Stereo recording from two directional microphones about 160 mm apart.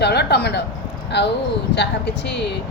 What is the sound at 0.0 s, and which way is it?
Speech, 90° left.